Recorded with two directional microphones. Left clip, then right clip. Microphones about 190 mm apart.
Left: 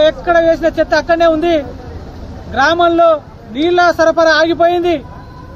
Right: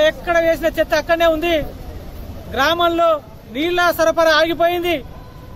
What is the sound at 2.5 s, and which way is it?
A man's voice, 45° right (ahead or behind).